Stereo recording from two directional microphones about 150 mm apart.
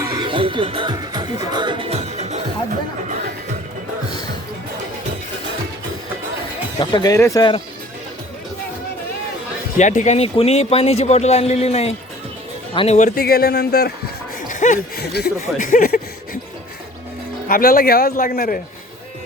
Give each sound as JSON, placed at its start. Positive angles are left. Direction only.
{"t": 0.0, "sound": "music", "side_deg": -25}
{"t": 6.7, "sound": "speech", "side_deg": 25}
{"t": 9.7, "sound": "speech", "side_deg": 55}
{"t": 13.1, "sound": "speech", "side_deg": 90}
{"t": 14.5, "sound": "speech", "side_deg": 55}
{"t": 17.5, "sound": "a man's voice", "side_deg": 75}